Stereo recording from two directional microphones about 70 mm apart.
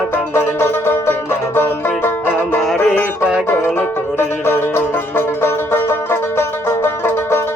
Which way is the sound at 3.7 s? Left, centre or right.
Left.